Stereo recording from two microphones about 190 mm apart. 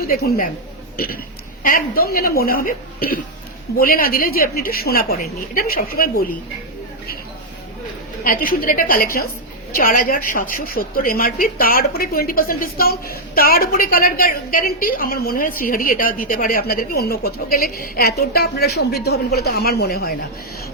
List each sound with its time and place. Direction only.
0.0 s a woman's voice: 50° left (ahead or behind)
8.2 s a woman's voice: 50° left (ahead or behind)